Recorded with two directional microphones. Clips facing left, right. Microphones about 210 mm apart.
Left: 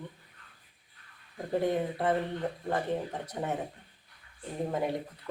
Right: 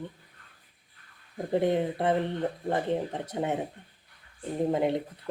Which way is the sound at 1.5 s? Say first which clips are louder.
Right 3 dB; 20° right (ahead or behind).